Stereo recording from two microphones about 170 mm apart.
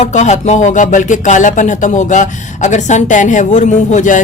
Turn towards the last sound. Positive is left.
turn(degrees=45)  # may be behind; listen again after turning